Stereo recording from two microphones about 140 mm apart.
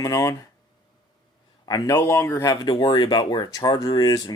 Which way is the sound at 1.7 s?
25° left (ahead or behind).